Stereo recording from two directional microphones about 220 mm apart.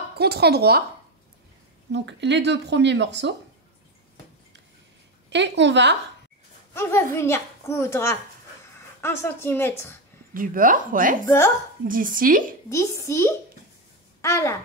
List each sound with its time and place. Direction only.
0.2 s speech: 45° right (ahead or behind)
1.9 s speech: 55° right (ahead or behind)
5.3 s speech: 55° right (ahead or behind)
6.7 s a child's voice: 10° left (ahead or behind)
10.3 s speech: 40° right (ahead or behind)
11.2 s a child's voice: 10° left (ahead or behind)
11.9 s speech: 40° right (ahead or behind)
12.6 s a child's voice: 15° left (ahead or behind)